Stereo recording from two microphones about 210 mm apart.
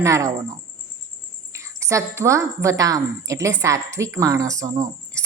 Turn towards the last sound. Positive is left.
turn(degrees=-15)  # may be behind; listen again after turning